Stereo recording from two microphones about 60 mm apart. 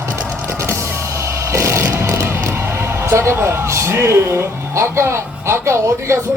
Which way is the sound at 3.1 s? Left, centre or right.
Right.